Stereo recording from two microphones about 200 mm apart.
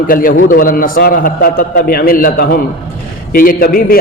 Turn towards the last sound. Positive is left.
turn(degrees=45)  # may be behind; listen again after turning